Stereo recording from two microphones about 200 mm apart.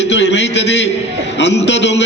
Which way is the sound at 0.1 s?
60° left (ahead or behind).